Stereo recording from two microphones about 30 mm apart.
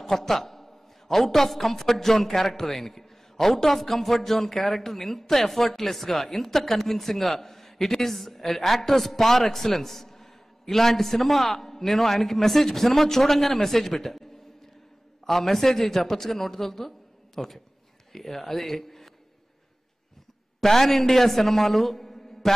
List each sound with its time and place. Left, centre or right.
0.0 s a man's voice: centre
15.2 s a man's voice: centre
20.6 s a man's voice: centre